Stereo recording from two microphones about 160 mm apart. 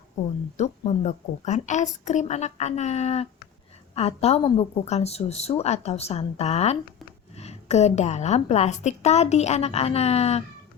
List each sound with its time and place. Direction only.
0.5 s a woman's voice: 45° left (ahead or behind)